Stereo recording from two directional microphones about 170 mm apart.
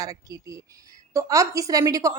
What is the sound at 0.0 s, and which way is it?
A woman's voice, 20° right (ahead or behind).